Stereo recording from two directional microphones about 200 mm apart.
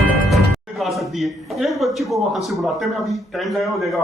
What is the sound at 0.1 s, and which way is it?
Speech, centre (ahead or behind).